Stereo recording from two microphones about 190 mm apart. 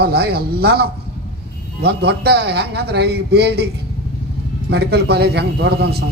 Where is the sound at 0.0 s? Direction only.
55° right (ahead or behind).